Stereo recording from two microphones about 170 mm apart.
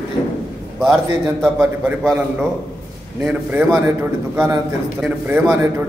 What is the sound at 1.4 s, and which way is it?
Speech, 10° right (ahead or behind).